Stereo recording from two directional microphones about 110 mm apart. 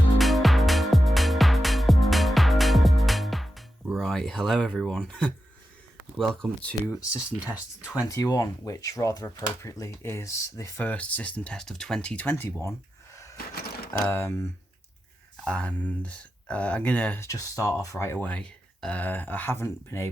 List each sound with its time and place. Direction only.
0.2 s music: centre (ahead or behind)
3.9 s speech: 5° left (ahead or behind)
6.9 s speech: 25° left (ahead or behind)
7.5 s speech: 10° right (ahead or behind)
8.0 s speech: 30° left (ahead or behind)
10.8 s speech: 10° left (ahead or behind)
14.1 s speech: 25° left (ahead or behind)
15.4 s speech: 10° left (ahead or behind)
17.2 s speech: 30° left (ahead or behind)